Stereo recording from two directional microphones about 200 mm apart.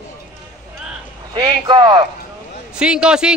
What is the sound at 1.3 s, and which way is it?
Speech, 25° right (ahead or behind).